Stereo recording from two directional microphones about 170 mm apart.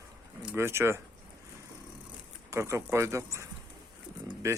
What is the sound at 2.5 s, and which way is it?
Speech, 15° right (ahead or behind).